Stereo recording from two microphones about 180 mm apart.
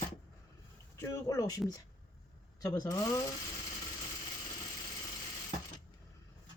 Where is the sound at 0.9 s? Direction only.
15° left (ahead or behind).